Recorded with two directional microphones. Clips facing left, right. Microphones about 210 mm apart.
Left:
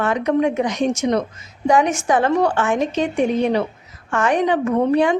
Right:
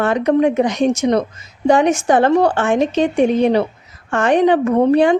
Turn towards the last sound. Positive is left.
turn(degrees=-35)  # may be behind; listen again after turning